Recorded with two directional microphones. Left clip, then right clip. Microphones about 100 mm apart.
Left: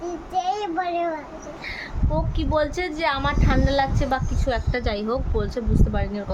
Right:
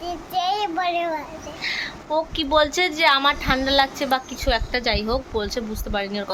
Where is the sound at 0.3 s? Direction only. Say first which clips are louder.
Right 2 dB; 20° left (ahead or behind).